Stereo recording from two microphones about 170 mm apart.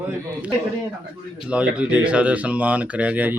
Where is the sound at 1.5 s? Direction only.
5° right (ahead or behind).